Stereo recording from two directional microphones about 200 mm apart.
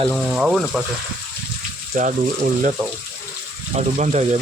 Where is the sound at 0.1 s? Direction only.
5° right (ahead or behind).